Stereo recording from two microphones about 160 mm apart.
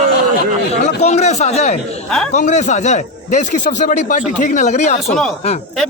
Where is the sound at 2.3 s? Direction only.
50° left (ahead or behind).